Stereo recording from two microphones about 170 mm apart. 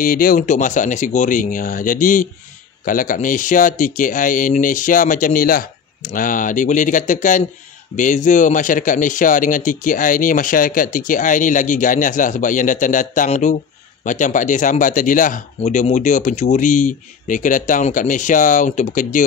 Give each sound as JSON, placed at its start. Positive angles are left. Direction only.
{"t": 0.0, "sound": "speech", "side_deg": 55}